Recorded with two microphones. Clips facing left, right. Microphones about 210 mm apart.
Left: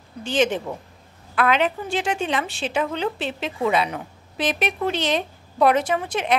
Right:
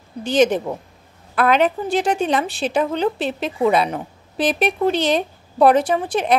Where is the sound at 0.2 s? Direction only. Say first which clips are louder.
Right 5 dB; 40° right (ahead or behind).